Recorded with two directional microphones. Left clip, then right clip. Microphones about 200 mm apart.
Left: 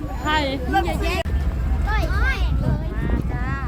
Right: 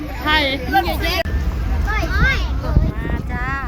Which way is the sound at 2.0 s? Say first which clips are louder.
Right 7 dB; 45° left (ahead or behind).